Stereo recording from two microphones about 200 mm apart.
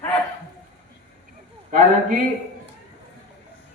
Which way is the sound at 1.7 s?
40° right (ahead or behind).